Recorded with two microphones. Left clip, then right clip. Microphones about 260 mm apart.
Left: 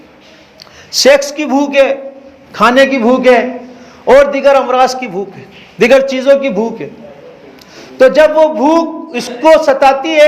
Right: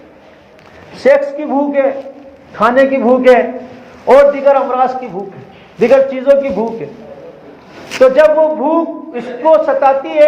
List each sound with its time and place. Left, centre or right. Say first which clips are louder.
1.0 s a man's voice: left 2 dB; left
8.1 s a man's voice: left 1 dB; left